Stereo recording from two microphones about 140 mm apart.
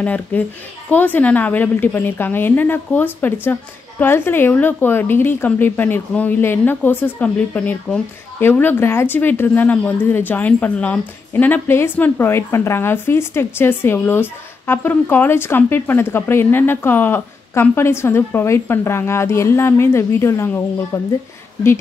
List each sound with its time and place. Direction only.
0.0 s a woman's voice: 10° left (ahead or behind)